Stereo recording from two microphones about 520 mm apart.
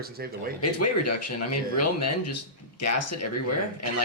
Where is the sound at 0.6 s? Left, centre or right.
Left.